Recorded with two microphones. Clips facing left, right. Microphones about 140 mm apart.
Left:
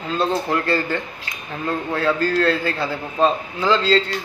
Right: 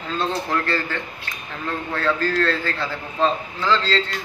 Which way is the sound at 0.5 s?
15° left (ahead or behind).